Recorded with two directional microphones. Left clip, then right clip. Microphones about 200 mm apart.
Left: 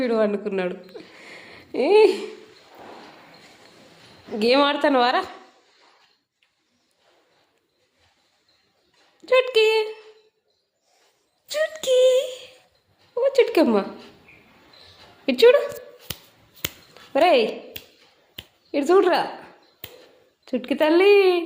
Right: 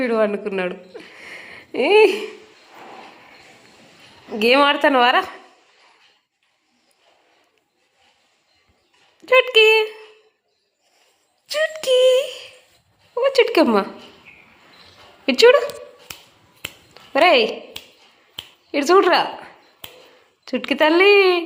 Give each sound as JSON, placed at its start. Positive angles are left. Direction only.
{"t": 0.0, "sound": "speech", "side_deg": 5}
{"t": 4.4, "sound": "speech", "side_deg": 0}
{"t": 9.2, "sound": "speech", "side_deg": 0}
{"t": 11.4, "sound": "speech", "side_deg": 5}
{"t": 15.3, "sound": "speech", "side_deg": -5}
{"t": 16.1, "sound": "finger snapping", "side_deg": 60}
{"t": 16.9, "sound": "a sound", "side_deg": 0}
{"t": 17.7, "sound": "tap", "side_deg": 15}
{"t": 18.7, "sound": "a woman's voice", "side_deg": 0}